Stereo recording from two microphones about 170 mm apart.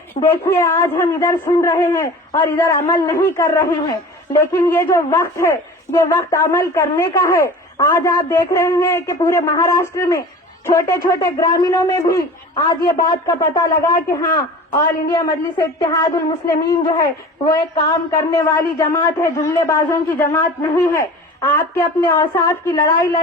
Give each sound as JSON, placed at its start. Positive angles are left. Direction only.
{"t": 0.1, "sound": "a man's voice", "side_deg": 15}